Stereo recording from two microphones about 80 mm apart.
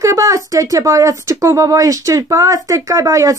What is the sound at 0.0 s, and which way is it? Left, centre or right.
Speech, right.